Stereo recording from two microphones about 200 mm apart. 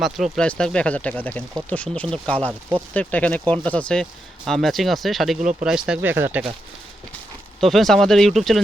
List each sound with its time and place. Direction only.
0.0 s speech: centre (ahead or behind)
5.4 s speech: 35° right (ahead or behind)
5.6 s speech: 5° right (ahead or behind)
7.6 s speech: centre (ahead or behind)